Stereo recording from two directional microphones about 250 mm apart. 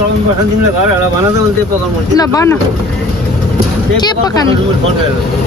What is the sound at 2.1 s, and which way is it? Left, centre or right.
Speech, centre.